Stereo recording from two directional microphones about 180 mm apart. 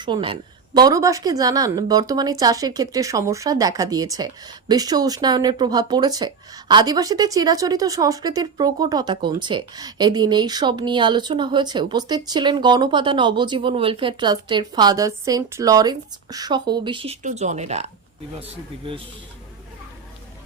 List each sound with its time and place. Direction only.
0.0 s speech: 25° right (ahead or behind)
17.2 s speech: 40° right (ahead or behind)